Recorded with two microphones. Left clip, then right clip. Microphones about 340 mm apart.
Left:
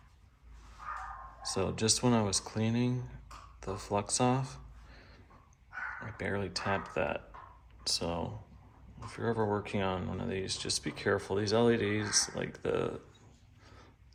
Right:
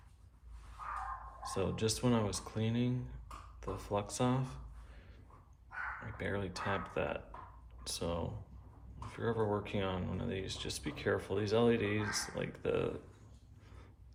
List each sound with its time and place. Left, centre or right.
1.4 s speech: centre
6.0 s speech: centre